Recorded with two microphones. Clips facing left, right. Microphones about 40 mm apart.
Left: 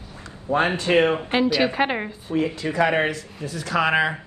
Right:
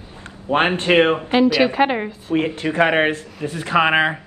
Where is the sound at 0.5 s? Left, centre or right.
Right.